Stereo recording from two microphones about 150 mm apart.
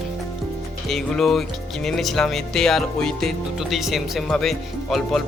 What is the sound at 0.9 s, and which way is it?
Speech, centre (ahead or behind).